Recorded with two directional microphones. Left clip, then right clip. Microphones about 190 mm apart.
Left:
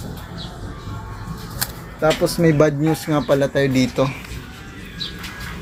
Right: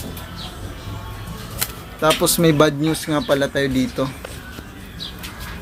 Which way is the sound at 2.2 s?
40° right (ahead or behind).